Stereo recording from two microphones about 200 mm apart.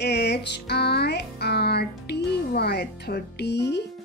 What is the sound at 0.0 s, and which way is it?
Music, 55° left (ahead or behind).